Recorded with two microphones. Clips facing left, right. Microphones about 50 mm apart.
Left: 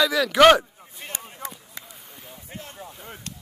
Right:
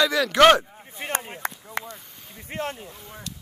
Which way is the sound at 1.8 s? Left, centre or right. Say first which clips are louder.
Right 9 dB; right.